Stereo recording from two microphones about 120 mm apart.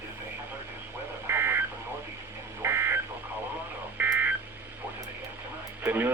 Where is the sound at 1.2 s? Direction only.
20° right (ahead or behind).